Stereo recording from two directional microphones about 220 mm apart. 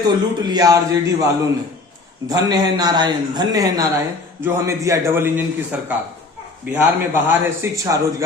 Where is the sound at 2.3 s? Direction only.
15° right (ahead or behind).